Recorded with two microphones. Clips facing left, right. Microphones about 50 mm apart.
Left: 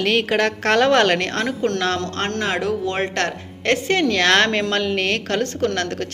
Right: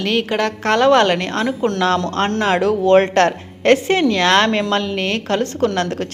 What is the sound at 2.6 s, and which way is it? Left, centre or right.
Speech, right.